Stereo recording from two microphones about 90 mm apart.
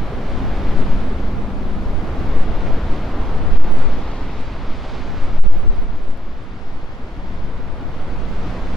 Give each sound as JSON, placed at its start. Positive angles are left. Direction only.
{"t": 0.3, "sound": "vehicle", "side_deg": 0}
{"t": 2.3, "sound": "vehicle", "side_deg": 0}